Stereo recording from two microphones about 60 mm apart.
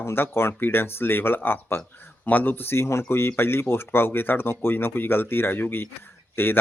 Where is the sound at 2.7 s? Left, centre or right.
Left.